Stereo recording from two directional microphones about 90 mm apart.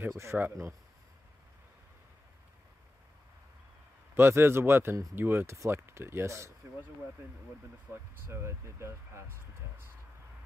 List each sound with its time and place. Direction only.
0.1 s speech: 30° right (ahead or behind)
4.1 s speech: 25° right (ahead or behind)
7.9 s speech: 30° right (ahead or behind)